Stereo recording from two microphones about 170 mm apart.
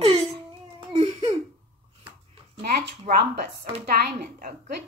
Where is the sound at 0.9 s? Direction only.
35° right (ahead or behind).